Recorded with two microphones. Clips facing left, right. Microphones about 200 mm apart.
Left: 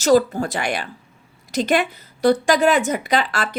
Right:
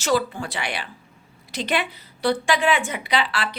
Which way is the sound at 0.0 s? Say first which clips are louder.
Left 7 dB; 40° left (ahead or behind).